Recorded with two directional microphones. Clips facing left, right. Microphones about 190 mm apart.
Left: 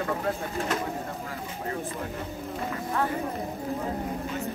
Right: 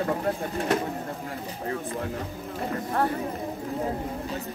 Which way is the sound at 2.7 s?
40° right (ahead or behind).